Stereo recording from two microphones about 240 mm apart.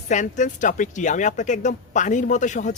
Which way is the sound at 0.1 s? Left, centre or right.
Left.